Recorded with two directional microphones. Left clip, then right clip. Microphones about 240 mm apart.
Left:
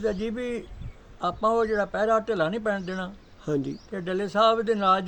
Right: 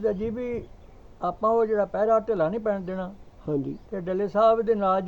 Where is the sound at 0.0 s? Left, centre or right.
Left.